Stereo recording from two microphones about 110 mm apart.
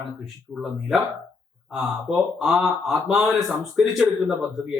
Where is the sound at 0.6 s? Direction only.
5° right (ahead or behind).